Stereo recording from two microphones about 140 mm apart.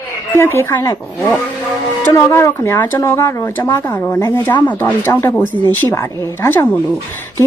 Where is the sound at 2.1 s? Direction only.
20° left (ahead or behind).